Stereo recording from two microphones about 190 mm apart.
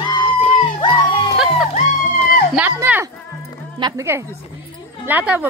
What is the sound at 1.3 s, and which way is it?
Music, centre (ahead or behind).